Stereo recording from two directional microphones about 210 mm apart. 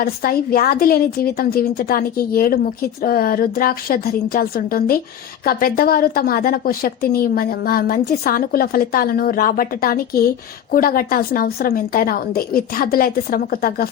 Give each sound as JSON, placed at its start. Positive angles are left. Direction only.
{"t": 0.0, "sound": "a woman's voice", "side_deg": 45}